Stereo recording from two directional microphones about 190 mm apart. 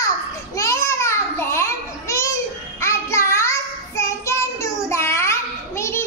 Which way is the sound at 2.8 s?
15° left (ahead or behind).